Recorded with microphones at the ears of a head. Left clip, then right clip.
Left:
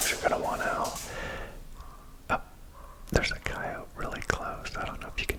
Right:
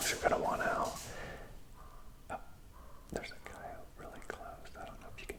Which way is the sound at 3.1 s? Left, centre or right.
Left.